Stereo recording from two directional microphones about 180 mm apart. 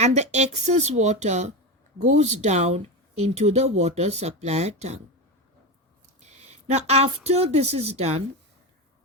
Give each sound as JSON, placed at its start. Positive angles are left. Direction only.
{"t": 0.0, "sound": "speech", "side_deg": -40}
{"t": 6.1, "sound": "speech", "side_deg": -35}